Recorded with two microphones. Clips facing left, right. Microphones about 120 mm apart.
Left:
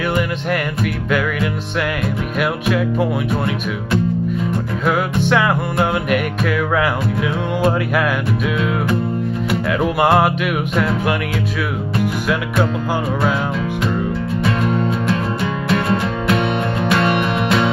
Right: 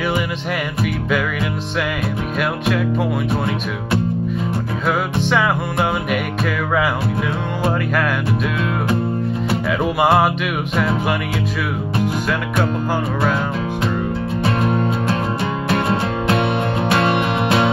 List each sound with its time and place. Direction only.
2.7 s music: centre (ahead or behind)
4.8 s music: centre (ahead or behind)
9.7 s music: centre (ahead or behind)
14.4 s music: 35° right (ahead or behind)